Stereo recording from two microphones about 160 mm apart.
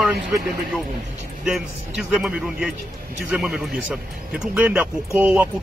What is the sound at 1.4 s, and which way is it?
Speech, centre (ahead or behind).